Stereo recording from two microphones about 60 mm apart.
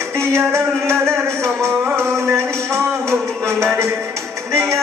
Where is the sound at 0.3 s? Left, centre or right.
Right.